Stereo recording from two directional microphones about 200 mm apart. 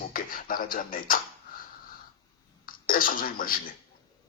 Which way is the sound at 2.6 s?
45° left (ahead or behind).